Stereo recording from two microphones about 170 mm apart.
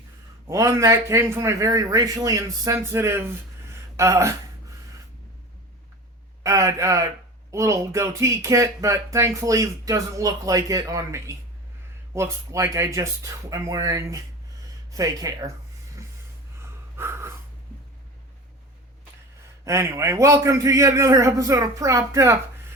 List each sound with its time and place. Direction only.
0.4 s a man's voice: 15° right (ahead or behind)
6.4 s a man's voice: 20° right (ahead or behind)
16.6 s snort: 15° right (ahead or behind)
19.6 s a man's voice: 15° right (ahead or behind)